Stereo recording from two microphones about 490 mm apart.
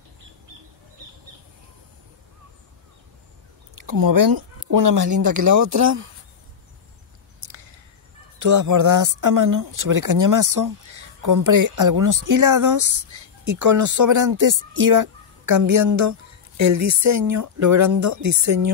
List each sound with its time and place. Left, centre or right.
3.7 s speech: right
7.3 s a sound: right
8.4 s speech: right